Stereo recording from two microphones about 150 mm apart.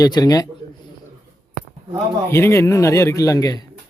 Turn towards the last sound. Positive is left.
turn(degrees=25)  # may be behind; listen again after turning